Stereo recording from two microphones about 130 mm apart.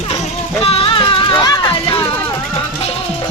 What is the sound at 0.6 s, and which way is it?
Music, 45° left (ahead or behind).